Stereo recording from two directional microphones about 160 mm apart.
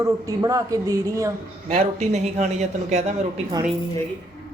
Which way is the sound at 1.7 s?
45° right (ahead or behind).